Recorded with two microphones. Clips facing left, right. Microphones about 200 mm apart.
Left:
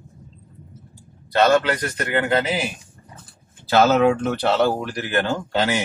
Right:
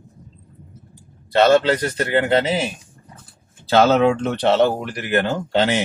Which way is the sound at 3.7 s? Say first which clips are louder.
Right 1 dB; 25° right (ahead or behind).